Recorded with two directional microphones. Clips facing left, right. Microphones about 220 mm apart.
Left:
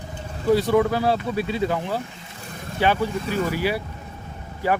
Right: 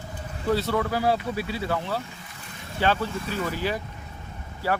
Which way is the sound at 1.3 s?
25° left (ahead or behind).